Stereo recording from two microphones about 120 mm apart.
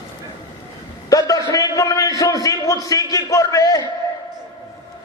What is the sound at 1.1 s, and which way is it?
A man's voice, 30° left (ahead or behind).